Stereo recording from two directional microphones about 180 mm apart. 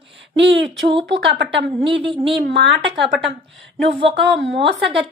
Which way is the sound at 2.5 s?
70° right (ahead or behind).